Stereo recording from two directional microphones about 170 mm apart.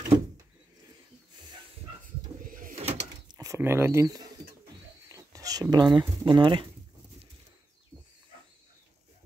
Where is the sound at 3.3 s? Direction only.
20° right (ahead or behind).